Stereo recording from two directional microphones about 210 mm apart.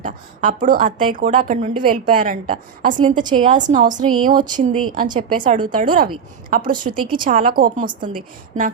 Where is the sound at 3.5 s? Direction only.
35° right (ahead or behind).